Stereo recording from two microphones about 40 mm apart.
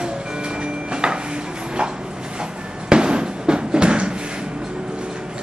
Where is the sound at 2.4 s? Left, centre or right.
Right.